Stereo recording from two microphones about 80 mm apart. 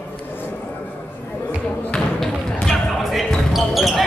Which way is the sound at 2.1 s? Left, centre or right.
Centre.